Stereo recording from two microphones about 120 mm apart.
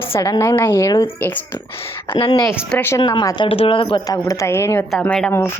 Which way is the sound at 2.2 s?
35° left (ahead or behind).